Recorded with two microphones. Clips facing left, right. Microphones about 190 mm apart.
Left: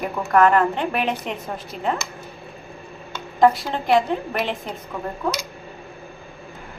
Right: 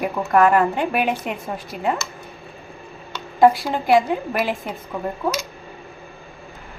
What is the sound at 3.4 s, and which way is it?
A woman's voice, 5° right (ahead or behind).